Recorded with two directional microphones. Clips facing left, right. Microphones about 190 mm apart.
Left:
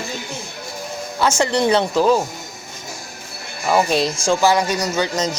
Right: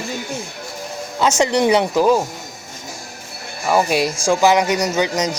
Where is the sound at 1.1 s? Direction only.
20° right (ahead or behind).